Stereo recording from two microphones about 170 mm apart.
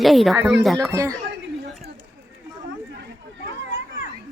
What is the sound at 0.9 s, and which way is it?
Speech, 20° right (ahead or behind).